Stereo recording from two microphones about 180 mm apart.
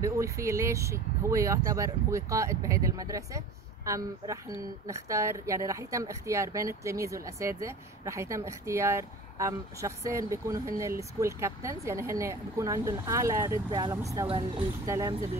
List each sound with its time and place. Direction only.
0.0 s speech: 15° right (ahead or behind)